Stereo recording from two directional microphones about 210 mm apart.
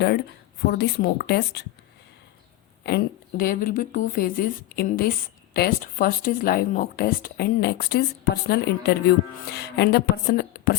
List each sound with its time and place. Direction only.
0.0 s speech: 50° left (ahead or behind)
2.8 s speech: 45° left (ahead or behind)